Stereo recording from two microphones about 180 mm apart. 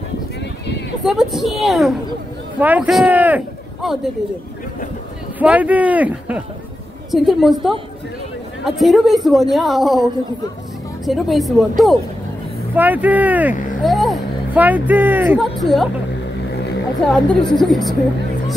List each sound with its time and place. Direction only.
1.0 s speech: centre (ahead or behind)
5.4 s speech: 10° right (ahead or behind)
8.7 s speech: centre (ahead or behind)
11.1 s speech: centre (ahead or behind)
15.6 s speech: centre (ahead or behind)
17.1 s speech: centre (ahead or behind)